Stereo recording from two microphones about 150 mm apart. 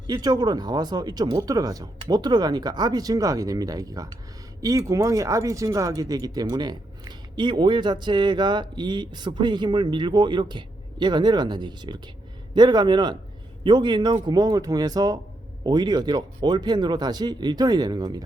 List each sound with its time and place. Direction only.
0.1 s speech: 25° right (ahead or behind)